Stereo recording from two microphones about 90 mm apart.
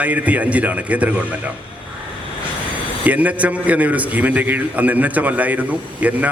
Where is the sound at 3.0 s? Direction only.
15° right (ahead or behind).